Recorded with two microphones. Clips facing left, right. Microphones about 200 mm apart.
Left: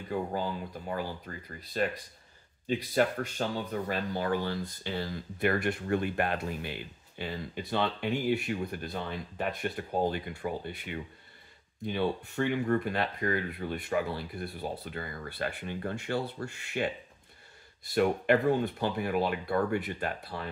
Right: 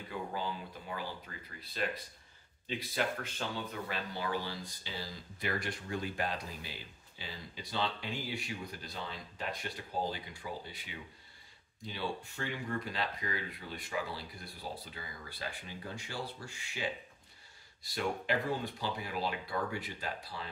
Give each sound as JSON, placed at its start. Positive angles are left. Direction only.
{"t": 0.1, "sound": "speech", "side_deg": 45}